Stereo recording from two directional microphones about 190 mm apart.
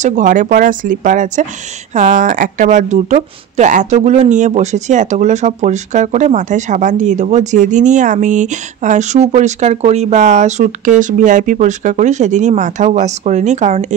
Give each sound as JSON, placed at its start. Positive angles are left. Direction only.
{"t": 0.0, "sound": "speech", "side_deg": -40}